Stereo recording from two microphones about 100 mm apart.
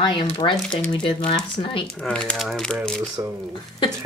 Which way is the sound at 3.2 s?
35° right (ahead or behind).